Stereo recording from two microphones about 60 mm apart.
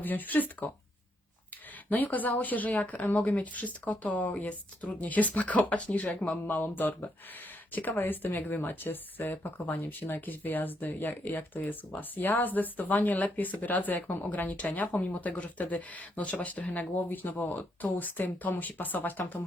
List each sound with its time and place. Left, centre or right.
0.0 s speech: left
1.9 s speech: left